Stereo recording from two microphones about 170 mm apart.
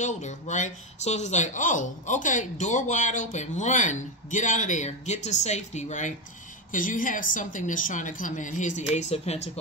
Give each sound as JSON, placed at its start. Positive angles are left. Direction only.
{"t": 0.0, "sound": "speech", "side_deg": 45}